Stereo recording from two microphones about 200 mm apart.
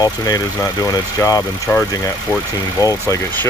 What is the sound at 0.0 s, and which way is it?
Speech, 20° left (ahead or behind).